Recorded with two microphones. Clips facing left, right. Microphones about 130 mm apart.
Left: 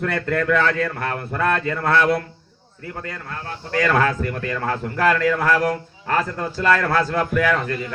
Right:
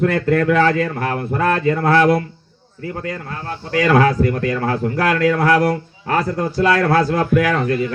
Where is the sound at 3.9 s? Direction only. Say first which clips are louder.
Right 7 dB; 35° right (ahead or behind).